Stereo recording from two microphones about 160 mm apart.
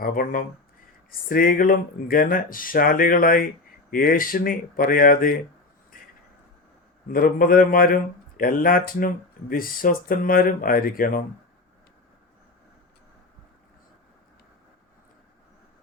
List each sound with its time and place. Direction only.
0.0 s speech: 60° left (ahead or behind)
7.1 s speech: 60° left (ahead or behind)